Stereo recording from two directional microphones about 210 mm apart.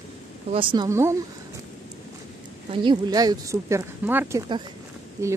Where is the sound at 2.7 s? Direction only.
20° right (ahead or behind).